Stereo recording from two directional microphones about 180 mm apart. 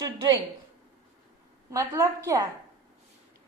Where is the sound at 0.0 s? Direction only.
20° right (ahead or behind).